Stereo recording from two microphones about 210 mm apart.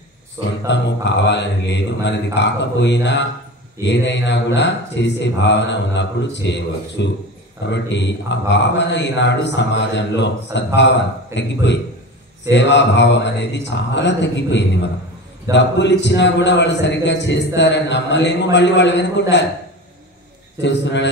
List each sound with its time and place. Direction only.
0.7 s a man's voice: 55° left (ahead or behind)
20.6 s a man's voice: 55° left (ahead or behind)